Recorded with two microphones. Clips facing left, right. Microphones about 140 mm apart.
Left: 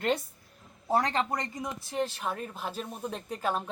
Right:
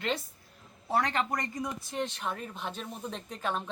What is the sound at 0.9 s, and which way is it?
Speech, 30° left (ahead or behind).